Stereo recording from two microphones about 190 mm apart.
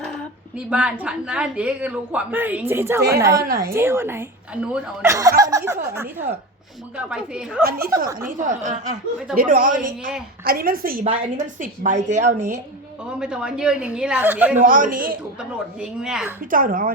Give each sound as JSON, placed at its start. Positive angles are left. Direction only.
{"t": 0.7, "sound": "a woman's voice", "side_deg": -5}
{"t": 3.4, "sound": "speech", "side_deg": -50}
{"t": 3.7, "sound": "a woman's voice", "side_deg": -15}
{"t": 7.6, "sound": "speech", "side_deg": -50}
{"t": 8.4, "sound": "a woman's voice", "side_deg": -40}
{"t": 13.1, "sound": "a woman's voice", "side_deg": -5}
{"t": 14.5, "sound": "speech", "side_deg": -45}
{"t": 15.8, "sound": "a woman's voice", "side_deg": -5}
{"t": 16.5, "sound": "speech", "side_deg": -45}